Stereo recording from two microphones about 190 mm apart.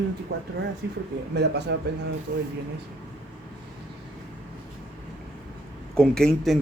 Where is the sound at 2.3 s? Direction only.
45° right (ahead or behind).